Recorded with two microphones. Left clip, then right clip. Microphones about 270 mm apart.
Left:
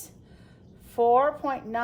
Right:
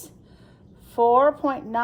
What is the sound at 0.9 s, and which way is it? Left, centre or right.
Speech, centre.